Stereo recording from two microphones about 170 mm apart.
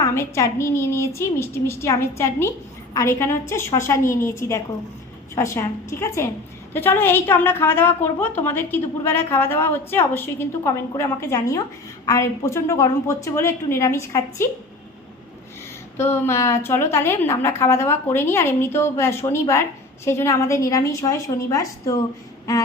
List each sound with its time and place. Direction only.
0.0 s a woman's voice: 15° left (ahead or behind)
16.0 s a woman's voice: 15° left (ahead or behind)